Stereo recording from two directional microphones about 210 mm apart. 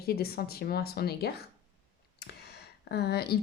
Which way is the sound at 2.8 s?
50° left (ahead or behind).